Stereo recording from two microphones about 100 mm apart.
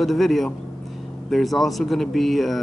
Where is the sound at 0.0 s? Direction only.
Centre (ahead or behind).